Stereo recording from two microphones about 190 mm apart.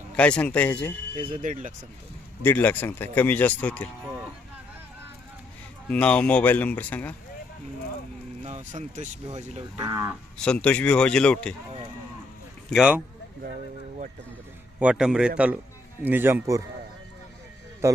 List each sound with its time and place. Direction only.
0.2 s speech: 5° left (ahead or behind)
1.3 s speech: 45° right (ahead or behind)
2.4 s speech: 10° left (ahead or behind)
5.9 s speech: 5° left (ahead or behind)
8.4 s speech: 40° right (ahead or behind)
9.8 s a man's voice: 15° right (ahead or behind)
10.3 s speech: 5° left (ahead or behind)
12.7 s speech: 5° right (ahead or behind)
14.8 s a man's voice: 5° right (ahead or behind)
17.8 s a man's voice: 15° right (ahead or behind)